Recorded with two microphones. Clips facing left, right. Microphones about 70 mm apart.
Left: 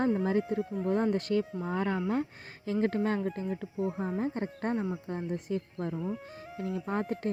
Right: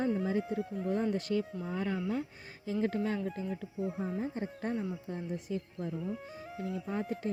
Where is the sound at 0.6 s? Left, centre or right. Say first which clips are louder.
Left 3 dB; centre.